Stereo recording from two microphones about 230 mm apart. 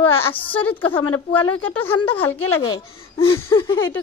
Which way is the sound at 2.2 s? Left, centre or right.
Left.